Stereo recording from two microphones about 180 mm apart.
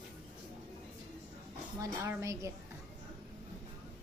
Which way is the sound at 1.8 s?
15° right (ahead or behind).